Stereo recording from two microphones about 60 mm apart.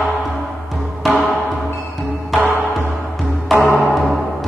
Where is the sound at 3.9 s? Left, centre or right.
Centre.